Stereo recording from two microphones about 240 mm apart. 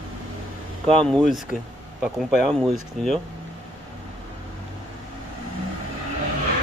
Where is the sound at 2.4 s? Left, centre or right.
Centre.